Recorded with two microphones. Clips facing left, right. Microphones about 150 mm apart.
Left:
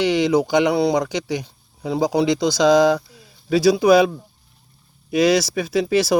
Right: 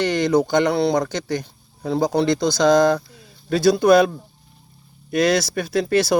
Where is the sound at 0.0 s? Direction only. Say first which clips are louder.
Left 1 dB; 10° left (ahead or behind).